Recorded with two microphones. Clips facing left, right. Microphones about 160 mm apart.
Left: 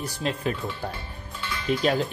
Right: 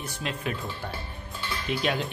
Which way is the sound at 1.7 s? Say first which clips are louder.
Left 5 dB; 40° left (ahead or behind).